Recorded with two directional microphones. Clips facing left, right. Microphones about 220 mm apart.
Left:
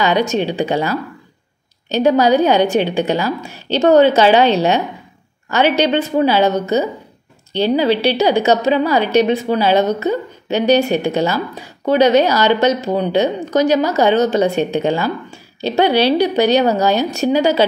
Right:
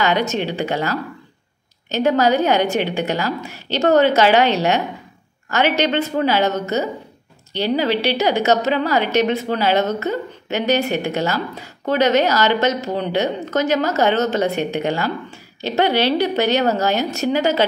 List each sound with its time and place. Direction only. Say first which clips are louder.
0.0 s speech: left 3 dB; 15° left (ahead or behind)
7.6 s a woman's voice: left 4 dB; 15° left (ahead or behind)